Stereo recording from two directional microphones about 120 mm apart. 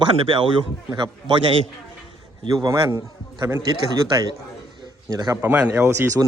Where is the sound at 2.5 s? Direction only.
30° right (ahead or behind).